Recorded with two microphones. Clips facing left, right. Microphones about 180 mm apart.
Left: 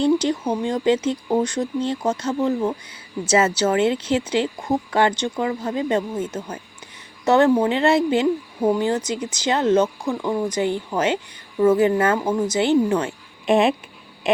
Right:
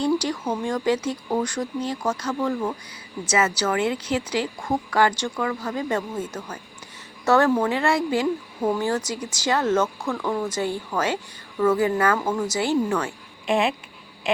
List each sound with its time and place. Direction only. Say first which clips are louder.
0.0 s speech: left 4 dB; 25° left (ahead or behind)